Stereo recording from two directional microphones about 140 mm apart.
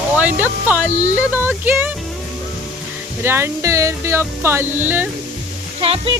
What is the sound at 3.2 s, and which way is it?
Speech, 15° right (ahead or behind).